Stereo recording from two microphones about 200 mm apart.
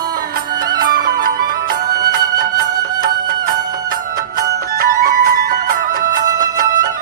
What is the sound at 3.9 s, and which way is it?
Music, 45° right (ahead or behind).